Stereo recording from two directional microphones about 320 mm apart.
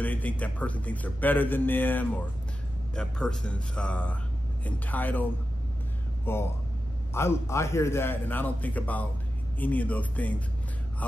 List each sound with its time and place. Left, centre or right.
0.0 s speech: centre
6.3 s a man's voice: centre